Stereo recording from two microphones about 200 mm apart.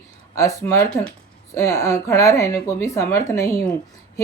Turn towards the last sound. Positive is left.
turn(degrees=10)  # may be behind; listen again after turning